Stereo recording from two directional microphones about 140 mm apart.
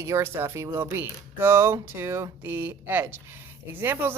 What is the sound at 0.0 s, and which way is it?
Speech, 20° right (ahead or behind).